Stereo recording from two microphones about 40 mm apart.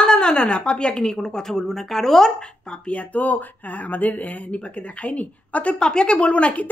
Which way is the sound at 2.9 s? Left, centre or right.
Left.